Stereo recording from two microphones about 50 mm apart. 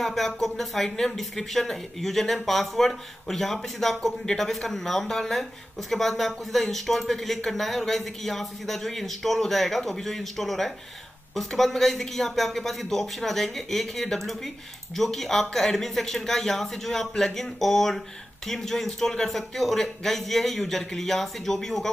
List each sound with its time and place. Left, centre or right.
0.0 s speech: centre